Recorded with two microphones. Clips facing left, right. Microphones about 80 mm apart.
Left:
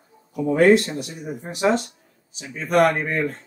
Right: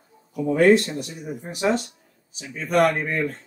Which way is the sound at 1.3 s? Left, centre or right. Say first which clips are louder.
Left 1 dB; left.